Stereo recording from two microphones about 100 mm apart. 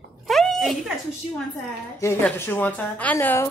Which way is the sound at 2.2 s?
15° left (ahead or behind).